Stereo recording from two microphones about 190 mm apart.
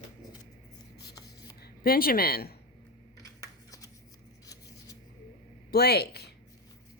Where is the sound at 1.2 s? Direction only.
55° left (ahead or behind).